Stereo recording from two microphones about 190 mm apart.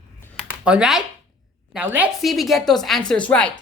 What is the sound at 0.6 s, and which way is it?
A woman's voice, 5° right (ahead or behind).